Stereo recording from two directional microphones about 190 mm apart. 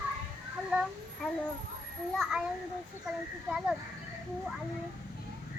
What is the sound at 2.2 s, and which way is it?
Speech, 5° right (ahead or behind).